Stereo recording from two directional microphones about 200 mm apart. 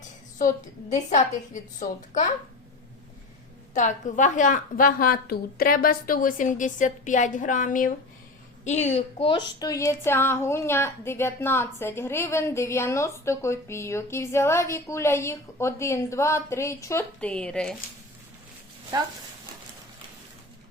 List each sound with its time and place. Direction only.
0.3 s a woman's voice: 40° left (ahead or behind)
3.8 s a woman's voice: 40° left (ahead or behind); by 17.7 s 5° left (ahead or behind)